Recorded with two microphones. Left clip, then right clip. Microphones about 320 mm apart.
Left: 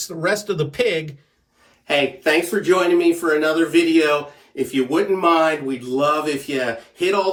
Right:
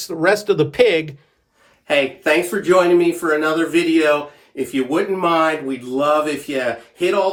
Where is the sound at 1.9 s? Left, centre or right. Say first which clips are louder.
Right 1 dB; centre.